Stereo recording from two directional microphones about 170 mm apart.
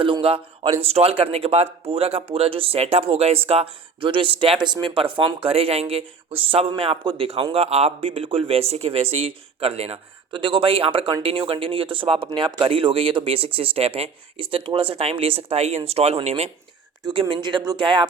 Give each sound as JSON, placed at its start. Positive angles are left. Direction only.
{"t": 0.0, "sound": "speech", "side_deg": -30}